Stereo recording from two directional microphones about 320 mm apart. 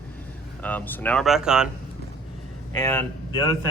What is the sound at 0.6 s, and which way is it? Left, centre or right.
Speech, centre.